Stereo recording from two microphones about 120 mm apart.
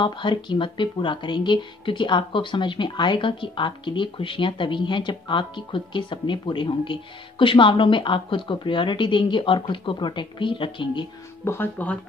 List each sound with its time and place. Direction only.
0.0 s speech: 40° left (ahead or behind)
11.4 s speech: 20° left (ahead or behind)